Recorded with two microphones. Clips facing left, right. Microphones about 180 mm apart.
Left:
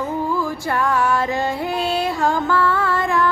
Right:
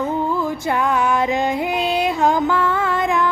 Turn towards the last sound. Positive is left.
turn(degrees=-20)  # may be behind; listen again after turning